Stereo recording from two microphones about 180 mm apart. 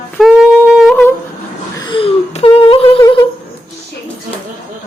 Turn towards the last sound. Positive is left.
turn(degrees=25)  # may be behind; listen again after turning